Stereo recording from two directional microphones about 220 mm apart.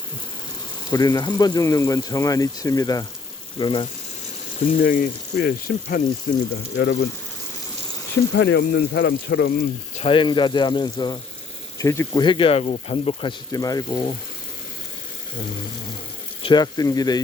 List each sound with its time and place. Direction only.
0.9 s speech: 15° left (ahead or behind)
4.6 s speech: 40° left (ahead or behind)
6.7 s speech: 55° left (ahead or behind)
8.4 s speech: 55° left (ahead or behind)
10.0 s speech: 20° left (ahead or behind)
16.4 s speech: 20° left (ahead or behind)